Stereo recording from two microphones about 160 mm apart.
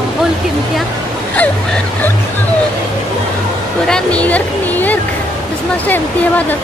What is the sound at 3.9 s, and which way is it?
Speech, 5° left (ahead or behind).